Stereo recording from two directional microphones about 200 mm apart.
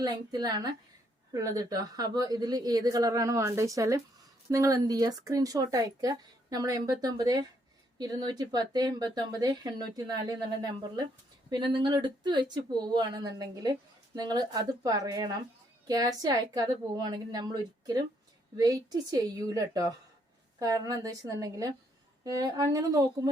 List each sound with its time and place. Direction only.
0.0 s speech: 20° right (ahead or behind)